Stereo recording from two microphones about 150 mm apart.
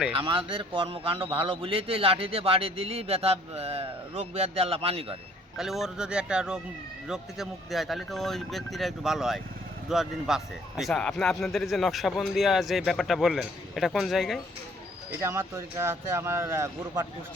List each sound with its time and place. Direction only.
0.1 s a man's voice: 35° right (ahead or behind)
5.5 s a man's voice: centre (ahead or behind)
15.2 s speech: 20° right (ahead or behind)